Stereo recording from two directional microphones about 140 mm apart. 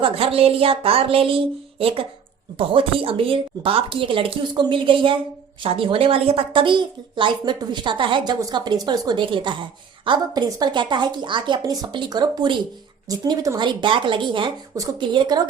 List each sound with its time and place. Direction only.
0.0 s a woman's voice: 40° right (ahead or behind)
2.6 s a woman's voice: 40° right (ahead or behind)